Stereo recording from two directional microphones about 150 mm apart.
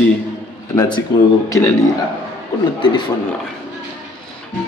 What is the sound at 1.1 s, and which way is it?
Speech, 30° left (ahead or behind).